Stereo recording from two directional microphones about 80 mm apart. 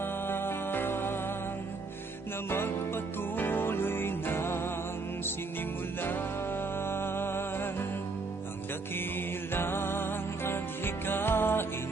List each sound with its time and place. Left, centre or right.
0.0 s music: left
2.5 s music: left
6.8 s music: left
9.5 s music: left